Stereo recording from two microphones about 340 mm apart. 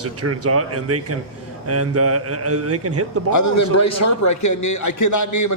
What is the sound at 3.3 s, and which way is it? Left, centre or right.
A man's voice, left.